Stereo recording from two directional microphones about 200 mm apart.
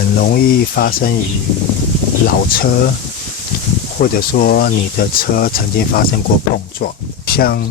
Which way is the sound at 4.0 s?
45° left (ahead or behind).